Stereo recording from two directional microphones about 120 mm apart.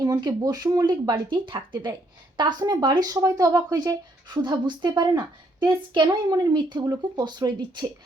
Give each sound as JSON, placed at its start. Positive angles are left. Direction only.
{"t": 0.0, "sound": "a woman's voice", "side_deg": -30}